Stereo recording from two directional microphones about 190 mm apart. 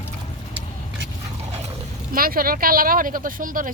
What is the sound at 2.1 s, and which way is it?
Speech, 50° right (ahead or behind).